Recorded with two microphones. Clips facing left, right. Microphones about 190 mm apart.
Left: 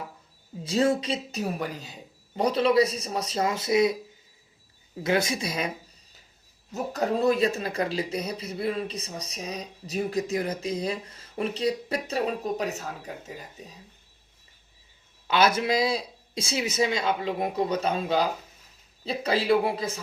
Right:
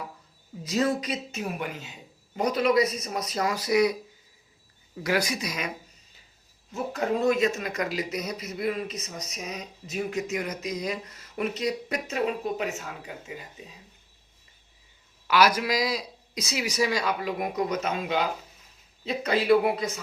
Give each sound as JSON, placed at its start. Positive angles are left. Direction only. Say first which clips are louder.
{"t": 0.6, "sound": "speech", "louder": "left 2 dB", "side_deg": 30}
{"t": 5.0, "sound": "speech", "louder": "left 2 dB", "side_deg": 25}
{"t": 6.7, "sound": "a man's voice", "louder": "left 1 dB", "side_deg": 40}
{"t": 15.3, "sound": "a man's voice", "louder": "even", "side_deg": 25}